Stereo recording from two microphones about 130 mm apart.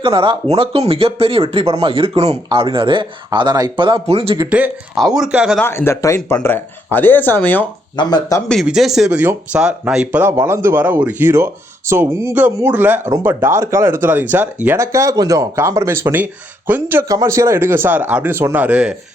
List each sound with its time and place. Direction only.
0.0 s speech: 45° right (ahead or behind)
2.5 s speech: 40° right (ahead or behind)
3.2 s speech: 30° right (ahead or behind)
4.0 s speech: 50° right (ahead or behind)
4.4 s speech: 10° right (ahead or behind)
5.5 s speech: 20° left (ahead or behind)
7.9 s speech: 30° left (ahead or behind)
8.6 s speech: 5° right (ahead or behind)
14.8 s speech: 25° right (ahead or behind); by 18.9 s 10° right (ahead or behind)